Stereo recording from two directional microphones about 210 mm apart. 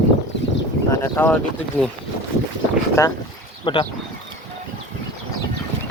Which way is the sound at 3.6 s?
25° left (ahead or behind).